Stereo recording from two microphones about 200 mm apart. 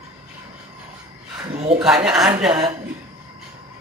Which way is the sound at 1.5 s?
30° right (ahead or behind).